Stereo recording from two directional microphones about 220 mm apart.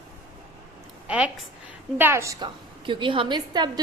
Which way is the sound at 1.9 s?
10° right (ahead or behind).